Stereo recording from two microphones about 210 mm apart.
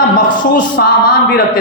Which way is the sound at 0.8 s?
55° left (ahead or behind).